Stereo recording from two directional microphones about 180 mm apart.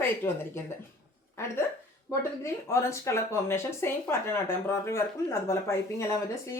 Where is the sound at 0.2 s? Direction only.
15° left (ahead or behind).